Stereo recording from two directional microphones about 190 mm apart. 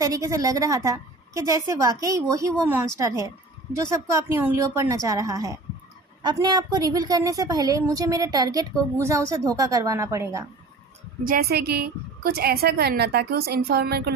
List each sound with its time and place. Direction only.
0.0 s a woman's voice: 15° right (ahead or behind)
11.2 s a woman's voice: 55° right (ahead or behind)